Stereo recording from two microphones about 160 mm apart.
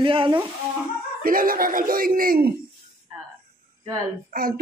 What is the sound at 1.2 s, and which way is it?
Speech, 60° right (ahead or behind).